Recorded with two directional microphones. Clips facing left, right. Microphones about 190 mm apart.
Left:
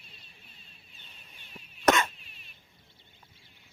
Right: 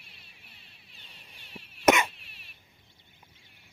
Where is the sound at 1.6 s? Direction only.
10° right (ahead or behind).